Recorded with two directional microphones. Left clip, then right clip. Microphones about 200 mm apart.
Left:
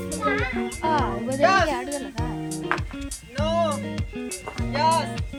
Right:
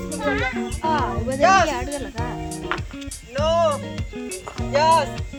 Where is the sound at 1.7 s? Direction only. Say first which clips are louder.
Right 1 dB; centre (ahead or behind).